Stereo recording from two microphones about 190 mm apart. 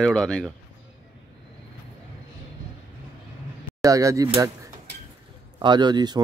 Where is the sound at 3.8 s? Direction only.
15° right (ahead or behind).